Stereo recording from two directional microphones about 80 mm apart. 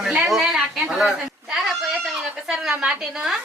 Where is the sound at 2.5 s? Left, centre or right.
Centre.